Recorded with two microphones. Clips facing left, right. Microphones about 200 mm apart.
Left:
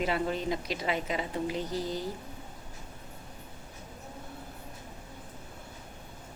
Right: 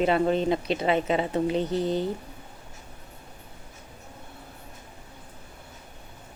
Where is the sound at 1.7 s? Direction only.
65° right (ahead or behind).